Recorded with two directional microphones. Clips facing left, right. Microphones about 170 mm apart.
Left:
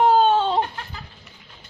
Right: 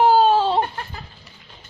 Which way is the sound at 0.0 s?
5° right (ahead or behind).